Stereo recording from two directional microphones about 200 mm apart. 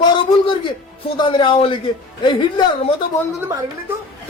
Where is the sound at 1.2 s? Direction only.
25° left (ahead or behind).